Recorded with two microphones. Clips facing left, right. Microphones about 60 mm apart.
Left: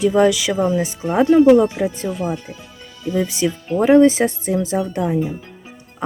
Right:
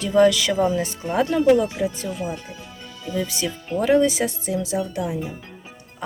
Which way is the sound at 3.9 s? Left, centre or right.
Left.